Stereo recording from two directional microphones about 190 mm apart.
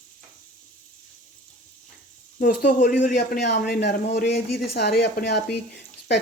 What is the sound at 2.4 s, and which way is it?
Speech, 45° left (ahead or behind).